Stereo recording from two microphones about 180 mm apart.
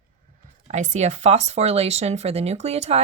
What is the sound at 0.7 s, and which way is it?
Speech, 40° right (ahead or behind).